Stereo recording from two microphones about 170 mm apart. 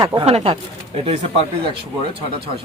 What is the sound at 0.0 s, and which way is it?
Speech, 30° right (ahead or behind).